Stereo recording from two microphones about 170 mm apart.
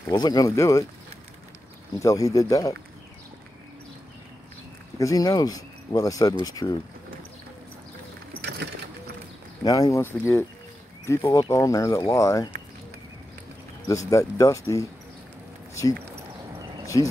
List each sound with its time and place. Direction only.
0.0 s speech: 25° left (ahead or behind)
2.0 s speech: 20° left (ahead or behind)
4.9 s speech: 20° left (ahead or behind)
8.4 s a sound: 75° right (ahead or behind)
9.6 s speech: 20° left (ahead or behind)
13.8 s speech: 20° left (ahead or behind)
16.8 s a sound: 20° left (ahead or behind)